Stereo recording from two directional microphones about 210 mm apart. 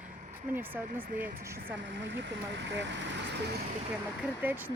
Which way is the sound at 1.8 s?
60° right (ahead or behind).